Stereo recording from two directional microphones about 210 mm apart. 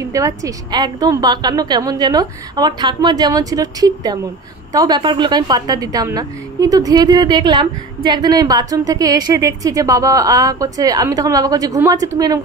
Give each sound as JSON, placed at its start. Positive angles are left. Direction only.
{"t": 0.0, "sound": "a woman's voice", "side_deg": -15}